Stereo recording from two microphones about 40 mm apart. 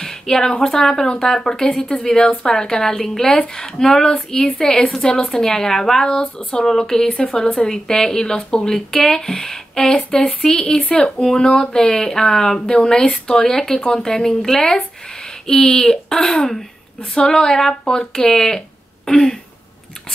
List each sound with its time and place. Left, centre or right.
0.0 s speech: centre